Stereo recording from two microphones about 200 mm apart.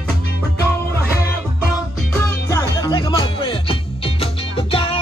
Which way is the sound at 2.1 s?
15° left (ahead or behind).